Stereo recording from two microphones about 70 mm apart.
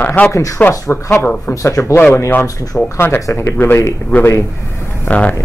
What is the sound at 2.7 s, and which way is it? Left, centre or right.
Speech, centre.